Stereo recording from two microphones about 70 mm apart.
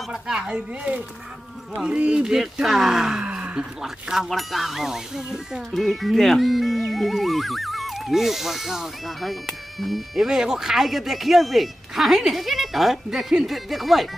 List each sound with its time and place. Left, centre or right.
0.1 s speech: centre
3.3 s a sound: centre
3.8 s speech: centre